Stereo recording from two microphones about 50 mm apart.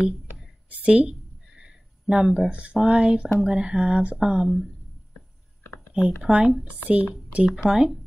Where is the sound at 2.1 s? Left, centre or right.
Centre.